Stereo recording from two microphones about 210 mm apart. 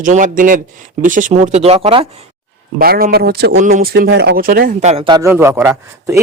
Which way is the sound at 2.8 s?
45° right (ahead or behind).